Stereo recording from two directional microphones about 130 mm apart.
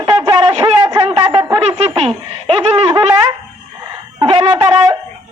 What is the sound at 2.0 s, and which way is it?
Laughter, 45° right (ahead or behind).